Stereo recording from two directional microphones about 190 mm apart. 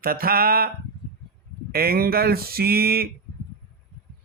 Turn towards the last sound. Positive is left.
turn(degrees=-55)  # may be behind; listen again after turning